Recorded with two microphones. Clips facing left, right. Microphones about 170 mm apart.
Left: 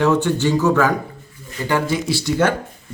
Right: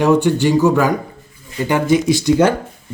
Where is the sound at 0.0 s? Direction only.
15° right (ahead or behind).